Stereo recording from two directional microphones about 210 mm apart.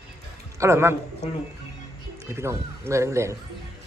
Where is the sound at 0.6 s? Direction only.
10° right (ahead or behind).